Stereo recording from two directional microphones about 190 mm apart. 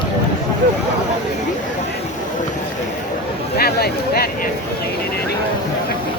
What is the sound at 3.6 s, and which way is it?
Speech, 55° left (ahead or behind).